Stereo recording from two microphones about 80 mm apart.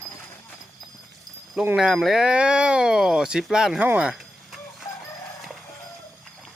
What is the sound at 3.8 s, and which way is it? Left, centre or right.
Speech, centre.